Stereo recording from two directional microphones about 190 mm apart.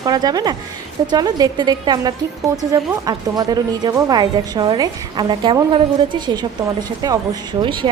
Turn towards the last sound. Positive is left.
turn(degrees=-25)  # may be behind; listen again after turning